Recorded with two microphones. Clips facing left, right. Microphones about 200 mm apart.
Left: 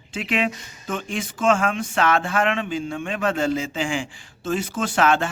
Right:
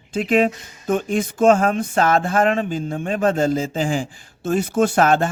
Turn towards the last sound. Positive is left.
turn(degrees=-40)  # may be behind; listen again after turning